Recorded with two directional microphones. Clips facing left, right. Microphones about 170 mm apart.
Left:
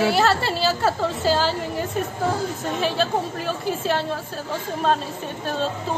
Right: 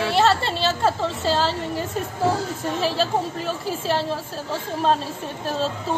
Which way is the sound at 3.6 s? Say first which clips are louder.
Left 1 dB; 30° right (ahead or behind).